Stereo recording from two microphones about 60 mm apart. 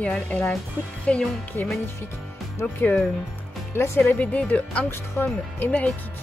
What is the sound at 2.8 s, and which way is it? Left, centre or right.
Music, left.